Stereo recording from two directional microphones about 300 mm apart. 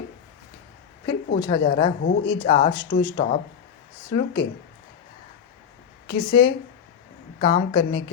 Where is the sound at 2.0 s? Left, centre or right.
Left.